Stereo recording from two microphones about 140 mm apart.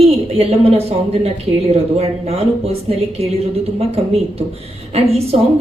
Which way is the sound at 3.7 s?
45° right (ahead or behind).